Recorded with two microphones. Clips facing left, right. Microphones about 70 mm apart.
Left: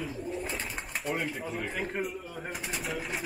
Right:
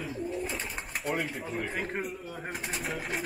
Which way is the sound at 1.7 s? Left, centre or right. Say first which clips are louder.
Even; right.